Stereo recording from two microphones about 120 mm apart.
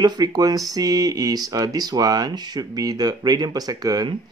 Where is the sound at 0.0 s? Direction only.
35° right (ahead or behind).